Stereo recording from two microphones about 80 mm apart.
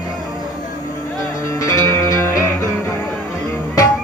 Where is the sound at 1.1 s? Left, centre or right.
Left.